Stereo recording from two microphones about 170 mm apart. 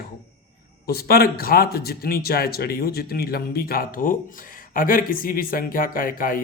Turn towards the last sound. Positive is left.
turn(degrees=55)  # may be behind; listen again after turning